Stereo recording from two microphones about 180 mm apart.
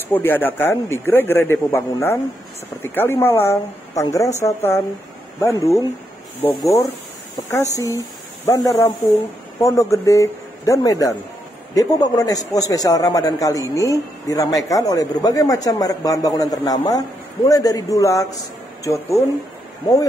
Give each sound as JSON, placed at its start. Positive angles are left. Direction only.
{"t": 0.1, "sound": "a man's voice", "side_deg": 10}